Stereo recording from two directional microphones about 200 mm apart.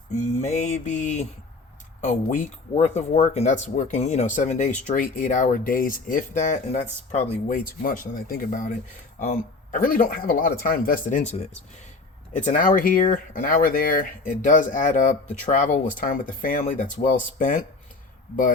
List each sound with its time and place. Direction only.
0.2 s speech: 35° left (ahead or behind)